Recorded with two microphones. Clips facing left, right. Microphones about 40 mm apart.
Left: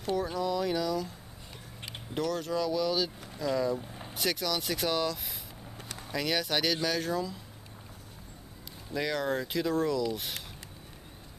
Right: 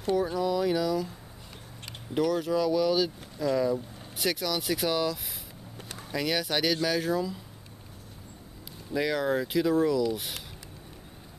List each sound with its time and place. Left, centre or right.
0.0 s speech: centre
2.1 s speech: centre
8.9 s speech: centre